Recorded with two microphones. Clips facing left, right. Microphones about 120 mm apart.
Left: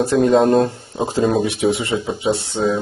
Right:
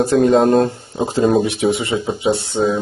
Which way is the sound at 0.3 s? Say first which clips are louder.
Left 1 dB; centre (ahead or behind).